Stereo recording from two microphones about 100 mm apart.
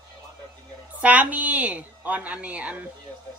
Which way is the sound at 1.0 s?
15° right (ahead or behind).